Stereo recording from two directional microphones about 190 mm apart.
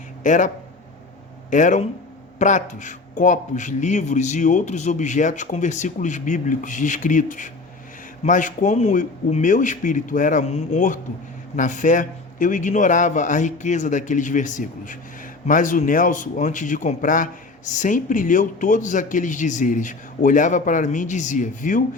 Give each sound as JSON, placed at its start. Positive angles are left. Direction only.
{"t": 0.2, "sound": "a man's voice", "side_deg": 40}